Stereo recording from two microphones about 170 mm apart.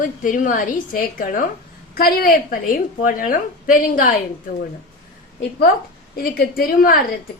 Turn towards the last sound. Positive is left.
turn(degrees=60)  # may be behind; listen again after turning